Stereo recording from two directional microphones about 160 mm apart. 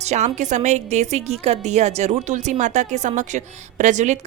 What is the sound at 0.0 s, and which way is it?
A woman's voice, 45° right (ahead or behind).